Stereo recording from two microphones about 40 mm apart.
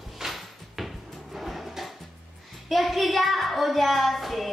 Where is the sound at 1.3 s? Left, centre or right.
Centre.